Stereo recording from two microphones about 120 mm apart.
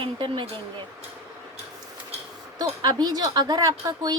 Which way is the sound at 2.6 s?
35° right (ahead or behind).